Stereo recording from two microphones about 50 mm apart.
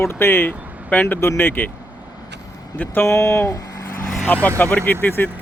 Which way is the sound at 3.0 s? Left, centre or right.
Left.